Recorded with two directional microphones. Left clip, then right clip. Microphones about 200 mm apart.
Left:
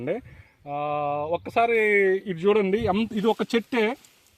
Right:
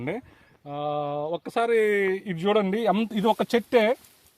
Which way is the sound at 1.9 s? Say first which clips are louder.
Left 3 dB; 15° right (ahead or behind).